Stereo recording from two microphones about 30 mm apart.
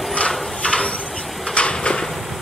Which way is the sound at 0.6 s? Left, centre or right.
Left.